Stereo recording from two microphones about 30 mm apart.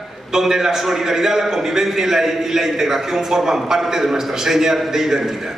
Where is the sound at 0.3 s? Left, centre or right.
Centre.